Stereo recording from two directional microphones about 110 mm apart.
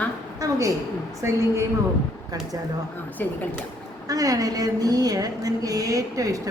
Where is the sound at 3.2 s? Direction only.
20° left (ahead or behind).